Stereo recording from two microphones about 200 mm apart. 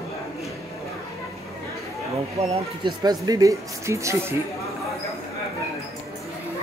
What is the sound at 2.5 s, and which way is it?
Speech, 25° right (ahead or behind).